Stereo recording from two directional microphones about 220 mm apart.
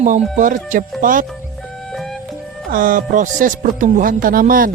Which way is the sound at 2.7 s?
40° right (ahead or behind).